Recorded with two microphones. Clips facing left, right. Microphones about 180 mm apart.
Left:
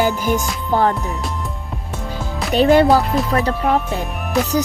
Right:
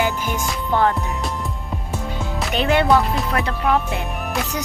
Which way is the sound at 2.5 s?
40° left (ahead or behind).